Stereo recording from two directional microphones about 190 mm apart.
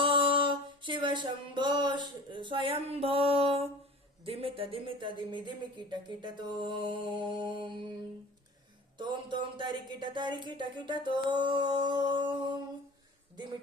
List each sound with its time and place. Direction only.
0.0 s music: 25° right (ahead or behind)
4.2 s speech: 30° right (ahead or behind)
9.0 s speech: 25° right (ahead or behind)